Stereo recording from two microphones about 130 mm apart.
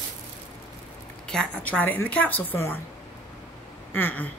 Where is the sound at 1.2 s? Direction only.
5° left (ahead or behind).